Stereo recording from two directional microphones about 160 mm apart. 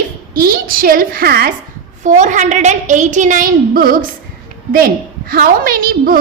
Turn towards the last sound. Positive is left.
turn(degrees=-65)  # may be behind; listen again after turning